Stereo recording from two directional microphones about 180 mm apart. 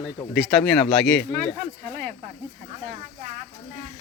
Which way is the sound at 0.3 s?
Centre (ahead or behind).